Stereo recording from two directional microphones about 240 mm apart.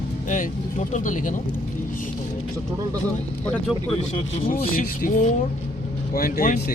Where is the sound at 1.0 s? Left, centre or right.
Left.